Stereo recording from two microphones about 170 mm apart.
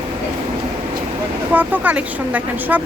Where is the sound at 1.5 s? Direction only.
10° right (ahead or behind).